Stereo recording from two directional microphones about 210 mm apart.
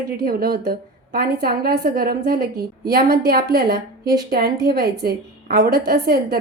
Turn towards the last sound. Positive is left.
turn(degrees=-45)  # may be behind; listen again after turning